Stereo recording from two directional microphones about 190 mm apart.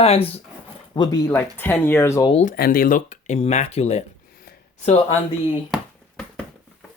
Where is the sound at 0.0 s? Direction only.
30° left (ahead or behind).